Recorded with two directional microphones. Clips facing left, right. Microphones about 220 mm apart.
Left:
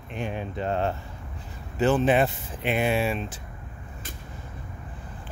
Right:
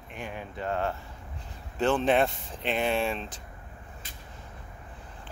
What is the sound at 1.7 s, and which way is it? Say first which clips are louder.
Speech: left 3 dB; 5° left (ahead or behind).